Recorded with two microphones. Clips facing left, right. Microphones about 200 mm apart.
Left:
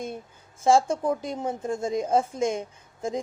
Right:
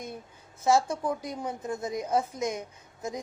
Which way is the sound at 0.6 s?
30° left (ahead or behind).